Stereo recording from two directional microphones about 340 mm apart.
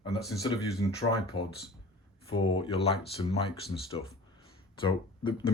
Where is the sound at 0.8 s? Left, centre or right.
Centre.